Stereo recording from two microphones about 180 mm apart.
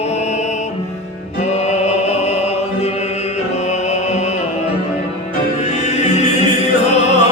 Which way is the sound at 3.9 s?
40° left (ahead or behind).